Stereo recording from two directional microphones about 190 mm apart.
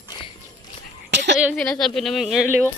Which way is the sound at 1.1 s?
70° right (ahead or behind).